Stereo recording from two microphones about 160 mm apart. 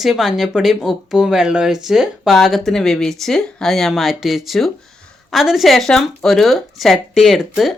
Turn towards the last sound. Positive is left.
turn(degrees=0)  # may be behind; listen again after turning